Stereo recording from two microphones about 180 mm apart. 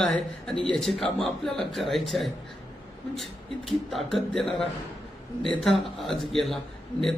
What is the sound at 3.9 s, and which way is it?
Speech, centre (ahead or behind).